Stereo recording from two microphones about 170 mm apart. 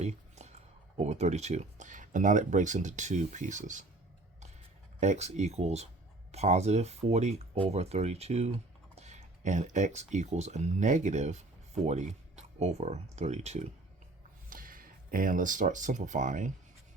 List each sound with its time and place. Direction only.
0.0 s a sound: 40° right (ahead or behind)
0.9 s speech: 40° right (ahead or behind)
4.9 s speech: 45° right (ahead or behind)
14.5 s speech: 55° right (ahead or behind)